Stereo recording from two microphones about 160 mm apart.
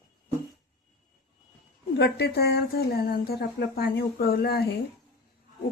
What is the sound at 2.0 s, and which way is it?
Speech, 90° left.